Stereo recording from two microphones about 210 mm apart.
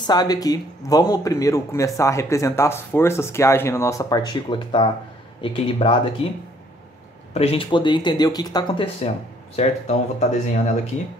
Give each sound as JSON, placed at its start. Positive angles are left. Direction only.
{"t": 0.0, "sound": "speech", "side_deg": 20}
{"t": 7.3, "sound": "speech", "side_deg": 25}
{"t": 9.6, "sound": "speech", "side_deg": 30}